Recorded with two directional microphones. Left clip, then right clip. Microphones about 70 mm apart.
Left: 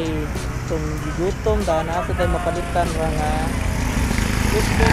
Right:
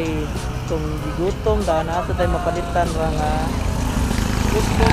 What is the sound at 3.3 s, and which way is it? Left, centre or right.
Vehicle, right.